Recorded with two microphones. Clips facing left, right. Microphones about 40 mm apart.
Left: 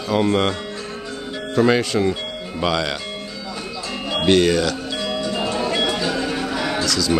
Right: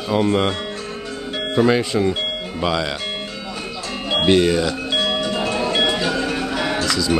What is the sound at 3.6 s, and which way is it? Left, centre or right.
Music, centre.